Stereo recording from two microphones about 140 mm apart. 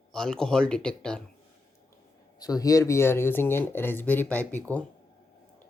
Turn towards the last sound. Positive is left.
turn(degrees=10)  # may be behind; listen again after turning